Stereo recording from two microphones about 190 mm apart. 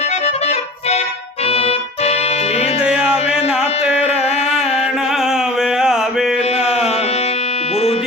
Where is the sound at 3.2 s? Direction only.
30° left (ahead or behind).